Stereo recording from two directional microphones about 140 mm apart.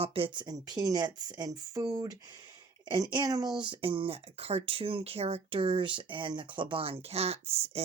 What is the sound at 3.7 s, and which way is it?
Speech, 40° right (ahead or behind).